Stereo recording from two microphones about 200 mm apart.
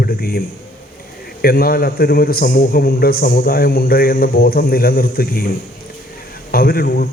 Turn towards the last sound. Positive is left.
turn(degrees=50)  # may be behind; listen again after turning